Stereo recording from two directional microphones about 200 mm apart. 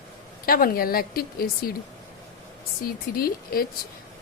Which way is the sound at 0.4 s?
45° left (ahead or behind).